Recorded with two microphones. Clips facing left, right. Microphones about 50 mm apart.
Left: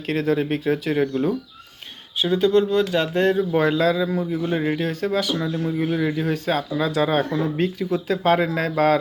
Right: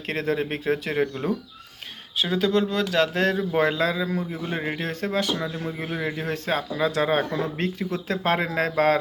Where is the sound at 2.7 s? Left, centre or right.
Right.